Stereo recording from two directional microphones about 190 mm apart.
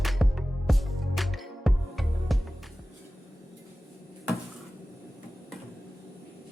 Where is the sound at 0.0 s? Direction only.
Centre (ahead or behind).